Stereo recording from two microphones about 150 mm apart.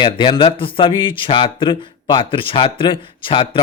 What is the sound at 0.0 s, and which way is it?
Speech, 30° left (ahead or behind).